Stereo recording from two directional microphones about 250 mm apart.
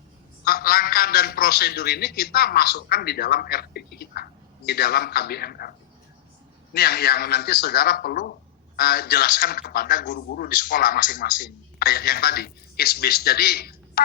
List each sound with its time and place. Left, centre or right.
0.4 s a man's voice: left
6.7 s a man's voice: left